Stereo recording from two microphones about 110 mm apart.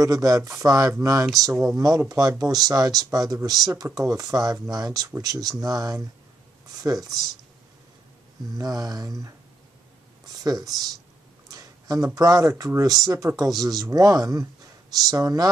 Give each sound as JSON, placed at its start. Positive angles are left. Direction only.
{"t": 0.0, "sound": "speech", "side_deg": -30}
{"t": 8.5, "sound": "speech", "side_deg": -35}
{"t": 10.2, "sound": "a sound", "side_deg": -35}
{"t": 10.7, "sound": "speech", "side_deg": -35}
{"t": 11.4, "sound": "a sound", "side_deg": -35}
{"t": 12.2, "sound": "speech", "side_deg": -30}